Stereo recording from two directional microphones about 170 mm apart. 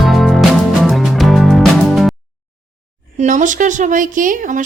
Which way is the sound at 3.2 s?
50° right (ahead or behind).